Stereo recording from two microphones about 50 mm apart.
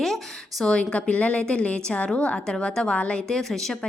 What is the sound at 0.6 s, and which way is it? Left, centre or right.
A woman's voice, left.